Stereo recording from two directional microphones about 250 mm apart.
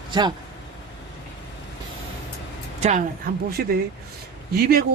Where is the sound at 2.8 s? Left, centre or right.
Right.